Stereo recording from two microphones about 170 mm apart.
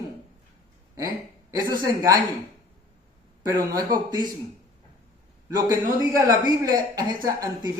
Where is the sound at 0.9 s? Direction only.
20° right (ahead or behind).